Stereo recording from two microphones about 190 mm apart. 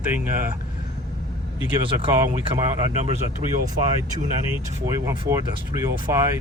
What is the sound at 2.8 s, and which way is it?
Speech, 30° right (ahead or behind).